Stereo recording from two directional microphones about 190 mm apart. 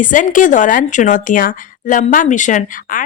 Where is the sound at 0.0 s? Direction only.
45° left (ahead or behind).